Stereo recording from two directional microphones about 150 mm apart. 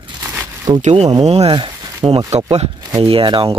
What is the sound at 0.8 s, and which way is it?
Speech, 45° right (ahead or behind).